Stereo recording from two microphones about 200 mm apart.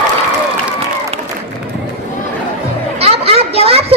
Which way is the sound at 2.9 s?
30° right (ahead or behind).